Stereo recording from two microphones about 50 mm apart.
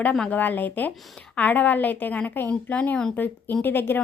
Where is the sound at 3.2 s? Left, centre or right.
Left.